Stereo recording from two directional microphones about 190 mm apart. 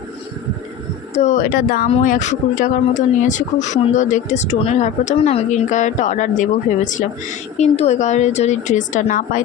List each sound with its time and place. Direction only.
1.1 s speech: 40° left (ahead or behind)